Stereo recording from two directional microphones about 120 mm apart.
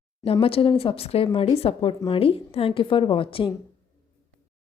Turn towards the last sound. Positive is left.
turn(degrees=50)  # may be behind; listen again after turning